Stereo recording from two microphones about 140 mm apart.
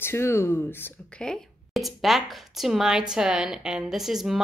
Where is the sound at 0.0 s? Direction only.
15° left (ahead or behind).